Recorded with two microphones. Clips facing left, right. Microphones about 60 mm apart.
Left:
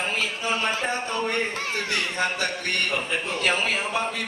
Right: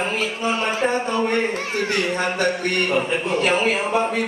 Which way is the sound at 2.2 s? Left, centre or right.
Right.